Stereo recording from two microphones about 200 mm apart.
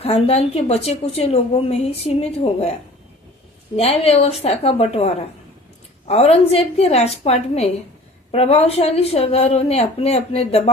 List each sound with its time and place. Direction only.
0.0 s a woman's voice: 30° left (ahead or behind)
3.8 s a woman's voice: 30° left (ahead or behind)